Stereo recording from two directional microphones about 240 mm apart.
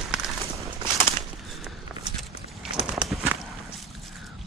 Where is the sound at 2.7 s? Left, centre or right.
Centre.